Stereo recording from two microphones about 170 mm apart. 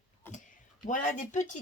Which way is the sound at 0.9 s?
50° left (ahead or behind).